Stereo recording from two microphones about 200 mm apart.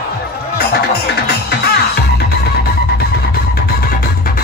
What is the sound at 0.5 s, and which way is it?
Music, 55° left (ahead or behind).